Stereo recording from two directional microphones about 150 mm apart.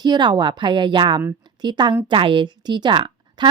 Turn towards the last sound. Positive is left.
turn(degrees=-30)  # may be behind; listen again after turning